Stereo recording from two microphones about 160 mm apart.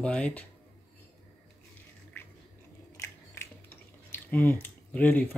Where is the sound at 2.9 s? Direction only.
15° left (ahead or behind).